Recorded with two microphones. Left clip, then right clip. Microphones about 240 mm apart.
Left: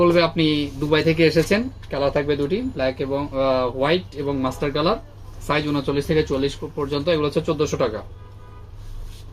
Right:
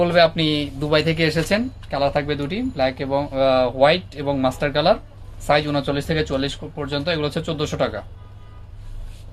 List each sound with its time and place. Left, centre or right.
0.0 s speech: right